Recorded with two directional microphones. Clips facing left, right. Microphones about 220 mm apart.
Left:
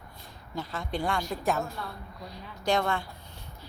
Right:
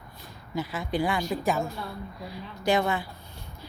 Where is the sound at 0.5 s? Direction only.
5° right (ahead or behind).